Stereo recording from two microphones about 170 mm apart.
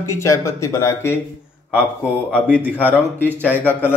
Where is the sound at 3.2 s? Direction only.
10° right (ahead or behind).